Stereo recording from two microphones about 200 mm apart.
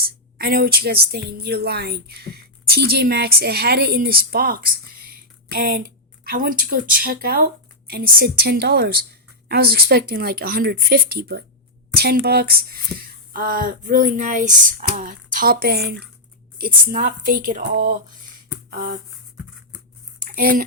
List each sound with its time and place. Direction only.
0.0 s a woman's voice: 50° right (ahead or behind)
20.2 s speech: 45° right (ahead or behind)